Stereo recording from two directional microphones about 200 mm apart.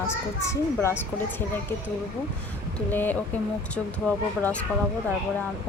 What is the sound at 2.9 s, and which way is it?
Speech, 10° left (ahead or behind).